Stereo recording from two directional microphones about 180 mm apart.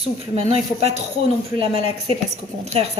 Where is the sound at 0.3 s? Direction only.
35° right (ahead or behind).